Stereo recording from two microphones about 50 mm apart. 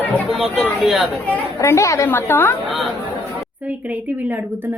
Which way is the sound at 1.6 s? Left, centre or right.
Left.